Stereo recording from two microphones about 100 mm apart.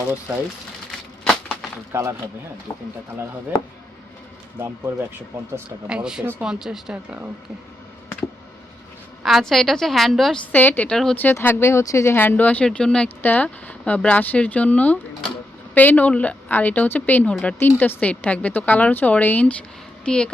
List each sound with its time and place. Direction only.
0.9 s a sound: 5° left (ahead or behind)
1.9 s speech: 25° right (ahead or behind)
5.9 s a woman's voice: 5° right (ahead or behind)
9.2 s a woman's voice: centre (ahead or behind)
10.5 s speech: 20° left (ahead or behind)
10.9 s a woman's voice: 5° left (ahead or behind)
11.2 s speech: 20° left (ahead or behind)